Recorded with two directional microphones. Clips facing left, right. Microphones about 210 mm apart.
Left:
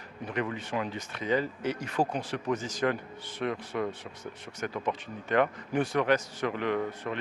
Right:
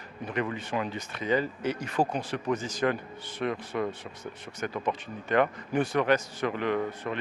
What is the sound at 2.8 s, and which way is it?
Speech, 15° right (ahead or behind).